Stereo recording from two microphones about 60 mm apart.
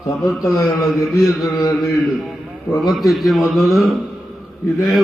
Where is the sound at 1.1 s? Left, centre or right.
Left.